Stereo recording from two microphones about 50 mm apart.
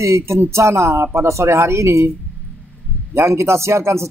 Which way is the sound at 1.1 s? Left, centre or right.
Right.